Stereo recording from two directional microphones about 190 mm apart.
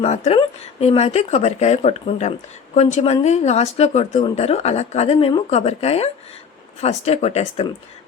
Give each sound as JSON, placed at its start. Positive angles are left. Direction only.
{"t": 0.0, "sound": "speech", "side_deg": 35}